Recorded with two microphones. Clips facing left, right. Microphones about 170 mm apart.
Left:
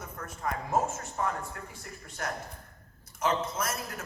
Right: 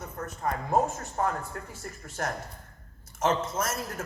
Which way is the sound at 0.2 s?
40° right (ahead or behind).